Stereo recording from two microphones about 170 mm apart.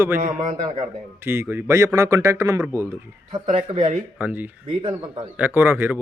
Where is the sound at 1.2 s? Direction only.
15° right (ahead or behind).